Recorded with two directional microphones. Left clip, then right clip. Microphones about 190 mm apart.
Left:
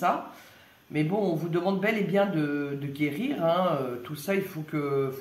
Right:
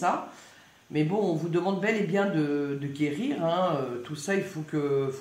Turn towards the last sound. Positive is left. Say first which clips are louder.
# right 1 dB
turn(degrees=15)  # may be behind; listen again after turning